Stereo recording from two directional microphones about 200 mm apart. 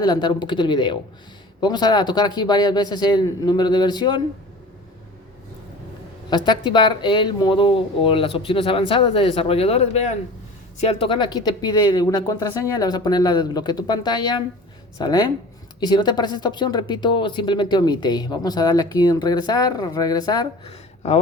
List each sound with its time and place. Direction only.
0.0 s speech: 20° left (ahead or behind)
6.3 s speech: 20° left (ahead or behind)
20.7 s a sound: 30° left (ahead or behind)